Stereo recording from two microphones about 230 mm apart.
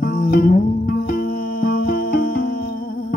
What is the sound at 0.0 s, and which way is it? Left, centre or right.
Music, left.